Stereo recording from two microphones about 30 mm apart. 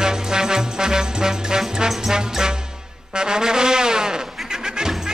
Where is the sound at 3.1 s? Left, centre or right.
Right.